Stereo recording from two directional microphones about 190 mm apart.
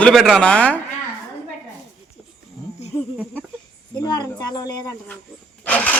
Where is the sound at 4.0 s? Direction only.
20° left (ahead or behind).